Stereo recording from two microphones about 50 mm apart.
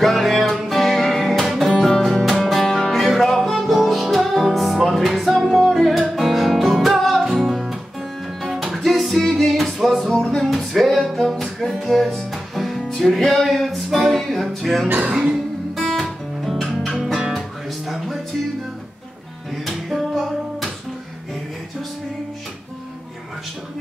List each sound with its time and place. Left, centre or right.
0.0 s music: centre
11.4 s music: centre
11.8 s music: centre
19.6 s music: centre